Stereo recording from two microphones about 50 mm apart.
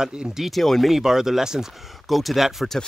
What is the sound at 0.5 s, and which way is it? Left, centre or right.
Speech, centre.